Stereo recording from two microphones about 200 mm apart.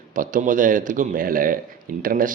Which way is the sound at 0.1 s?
40° right (ahead or behind).